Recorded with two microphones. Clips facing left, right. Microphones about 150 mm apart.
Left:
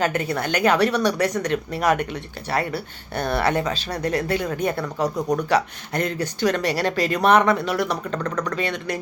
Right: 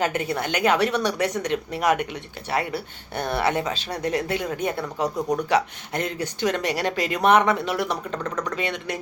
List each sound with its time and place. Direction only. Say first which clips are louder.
0.0 s speech: left 2 dB; 20° right (ahead or behind)